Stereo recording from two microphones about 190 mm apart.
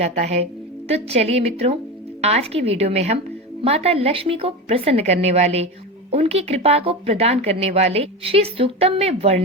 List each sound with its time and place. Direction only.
0.0 s speech: 35° right (ahead or behind)